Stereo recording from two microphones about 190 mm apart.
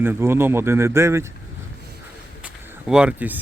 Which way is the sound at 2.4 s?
5° right (ahead or behind).